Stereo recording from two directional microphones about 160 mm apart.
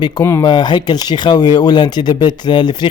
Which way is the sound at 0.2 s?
15° left (ahead or behind).